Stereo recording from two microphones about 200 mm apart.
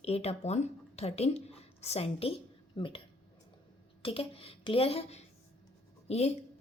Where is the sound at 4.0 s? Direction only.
25° left (ahead or behind).